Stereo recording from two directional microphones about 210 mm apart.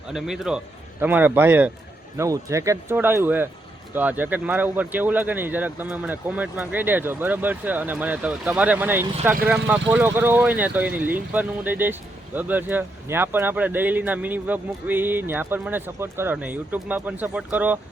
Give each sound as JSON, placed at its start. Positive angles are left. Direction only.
{"t": 0.1, "sound": "a man's voice", "side_deg": 0}